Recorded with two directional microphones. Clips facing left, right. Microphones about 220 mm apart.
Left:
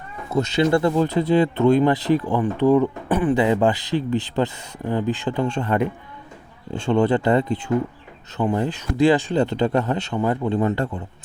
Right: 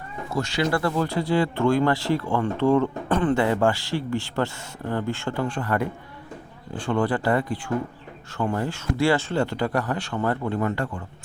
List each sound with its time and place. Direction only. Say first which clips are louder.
0.3 s speech: left 6 dB; 20° left (ahead or behind)